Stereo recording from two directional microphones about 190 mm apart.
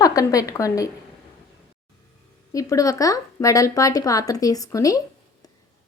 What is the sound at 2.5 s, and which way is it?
Speech, 15° left (ahead or behind).